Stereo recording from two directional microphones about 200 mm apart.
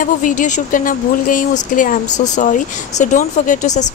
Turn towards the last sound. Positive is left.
turn(degrees=35)  # may be behind; listen again after turning